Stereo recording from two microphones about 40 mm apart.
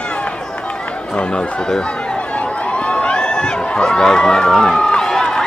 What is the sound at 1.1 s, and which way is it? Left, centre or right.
Speech, left.